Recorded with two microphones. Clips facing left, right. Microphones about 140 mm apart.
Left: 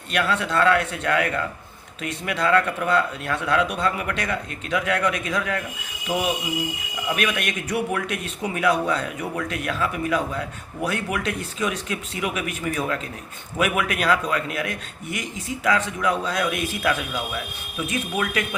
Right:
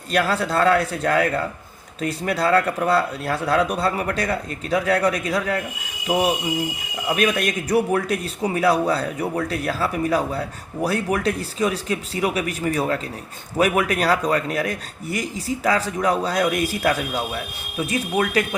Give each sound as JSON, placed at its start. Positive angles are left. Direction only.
{"t": 0.1, "sound": "speech", "side_deg": -35}